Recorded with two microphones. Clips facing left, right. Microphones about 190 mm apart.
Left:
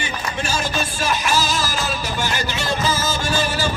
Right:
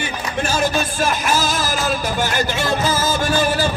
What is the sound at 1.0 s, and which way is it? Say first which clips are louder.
Music: right 1 dB; 50° right (ahead or behind).